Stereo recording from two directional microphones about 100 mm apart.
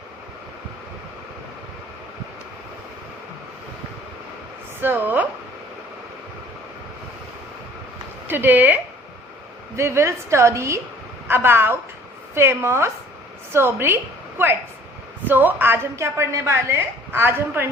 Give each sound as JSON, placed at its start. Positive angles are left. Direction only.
{"t": 4.8, "sound": "a woman's voice", "side_deg": -20}
{"t": 8.3, "sound": "a woman's voice", "side_deg": -20}